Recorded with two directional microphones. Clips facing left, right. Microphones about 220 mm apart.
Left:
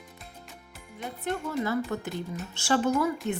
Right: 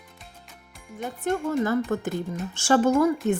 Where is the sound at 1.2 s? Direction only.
45° right (ahead or behind).